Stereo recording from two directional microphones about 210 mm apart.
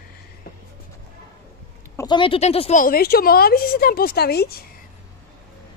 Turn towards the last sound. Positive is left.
turn(degrees=50)  # may be behind; listen again after turning